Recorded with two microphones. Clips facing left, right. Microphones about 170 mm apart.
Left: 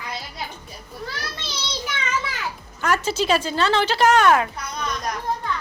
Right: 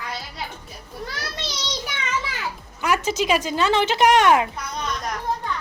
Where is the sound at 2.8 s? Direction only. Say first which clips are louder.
Even; 15° right (ahead or behind).